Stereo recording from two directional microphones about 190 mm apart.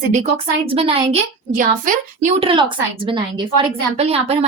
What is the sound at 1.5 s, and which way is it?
Speech, 45° right (ahead or behind).